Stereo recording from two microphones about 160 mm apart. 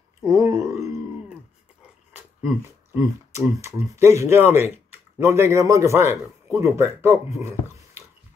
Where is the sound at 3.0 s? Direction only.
20° right (ahead or behind).